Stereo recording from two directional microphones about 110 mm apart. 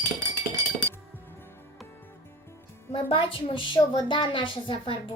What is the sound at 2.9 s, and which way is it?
A woman's voice, 55° left (ahead or behind).